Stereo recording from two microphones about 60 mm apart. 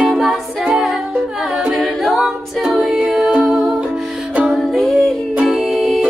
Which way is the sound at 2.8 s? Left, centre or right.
Centre.